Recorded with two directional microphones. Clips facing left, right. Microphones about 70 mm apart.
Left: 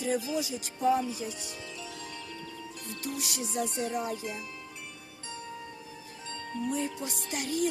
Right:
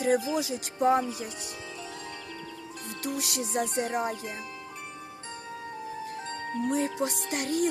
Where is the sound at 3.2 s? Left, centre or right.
Right.